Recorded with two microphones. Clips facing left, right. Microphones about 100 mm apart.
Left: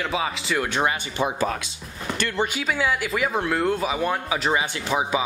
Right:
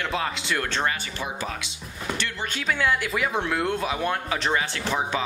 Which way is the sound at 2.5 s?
5° left (ahead or behind).